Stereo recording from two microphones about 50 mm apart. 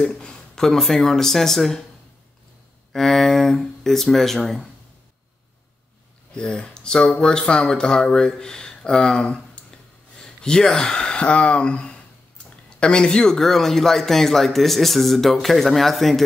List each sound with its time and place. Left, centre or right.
0.2 s speech: centre
2.9 s speech: centre
6.3 s speech: centre
9.6 s a sound: left
10.1 s speech: centre